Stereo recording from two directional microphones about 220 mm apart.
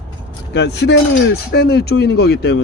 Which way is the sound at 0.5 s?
50° left (ahead or behind).